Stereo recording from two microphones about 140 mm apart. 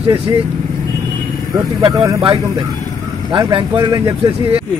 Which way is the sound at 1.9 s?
25° right (ahead or behind).